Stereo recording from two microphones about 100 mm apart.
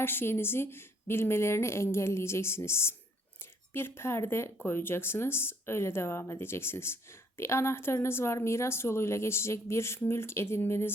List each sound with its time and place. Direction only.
0.0 s speech: 25° left (ahead or behind)